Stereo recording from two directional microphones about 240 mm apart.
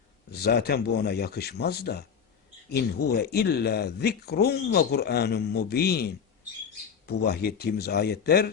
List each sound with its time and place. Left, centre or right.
0.3 s speech: left
7.2 s speech: left